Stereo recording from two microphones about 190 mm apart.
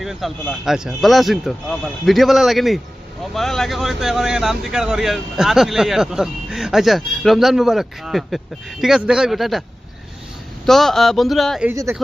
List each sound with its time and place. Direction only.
0.0 s speech: centre (ahead or behind)
10.7 s speech: centre (ahead or behind)
11.7 s speech: 15° right (ahead or behind)